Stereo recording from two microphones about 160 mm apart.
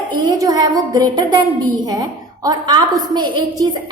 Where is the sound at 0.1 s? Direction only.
25° right (ahead or behind).